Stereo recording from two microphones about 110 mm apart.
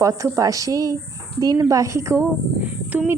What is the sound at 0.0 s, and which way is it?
A woman's voice, 30° right (ahead or behind).